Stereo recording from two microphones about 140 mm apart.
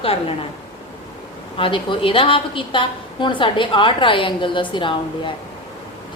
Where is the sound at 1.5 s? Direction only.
40° left (ahead or behind).